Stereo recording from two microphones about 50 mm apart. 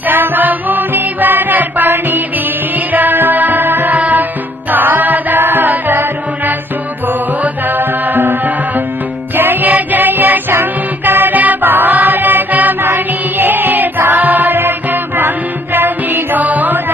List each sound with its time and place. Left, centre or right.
0.0 s music: right